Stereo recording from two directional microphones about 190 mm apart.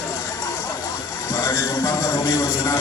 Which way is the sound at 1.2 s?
15° left (ahead or behind).